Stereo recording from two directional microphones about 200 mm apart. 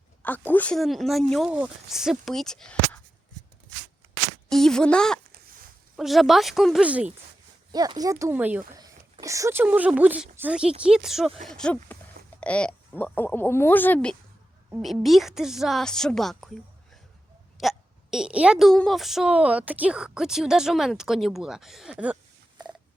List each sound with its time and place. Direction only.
0.2 s speech: 10° left (ahead or behind)
4.4 s speech: centre (ahead or behind)
7.7 s speech: 20° right (ahead or behind); by 16.5 s centre (ahead or behind)
17.6 s speech: centre (ahead or behind)